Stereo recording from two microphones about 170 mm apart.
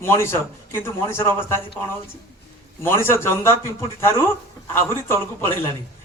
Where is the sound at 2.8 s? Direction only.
15° left (ahead or behind).